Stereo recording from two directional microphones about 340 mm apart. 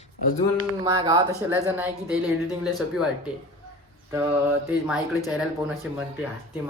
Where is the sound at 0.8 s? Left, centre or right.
Centre.